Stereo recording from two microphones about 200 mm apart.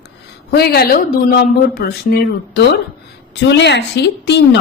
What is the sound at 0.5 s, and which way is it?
Speech, 50° left (ahead or behind).